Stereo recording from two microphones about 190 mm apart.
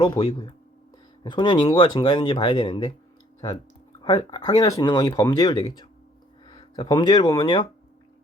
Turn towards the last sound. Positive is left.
turn(degrees=25)  # may be behind; listen again after turning